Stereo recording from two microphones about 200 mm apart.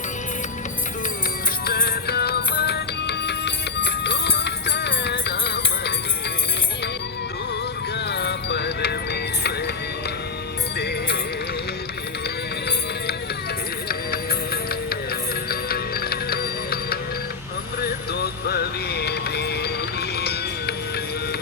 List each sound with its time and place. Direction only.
1.6 s music: 50° left (ahead or behind)
8.0 s music: 55° left (ahead or behind)
10.8 s music: 55° left (ahead or behind)
13.8 s music: 50° left (ahead or behind)